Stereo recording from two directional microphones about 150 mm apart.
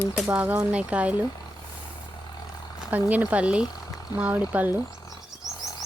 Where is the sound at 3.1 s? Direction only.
10° right (ahead or behind).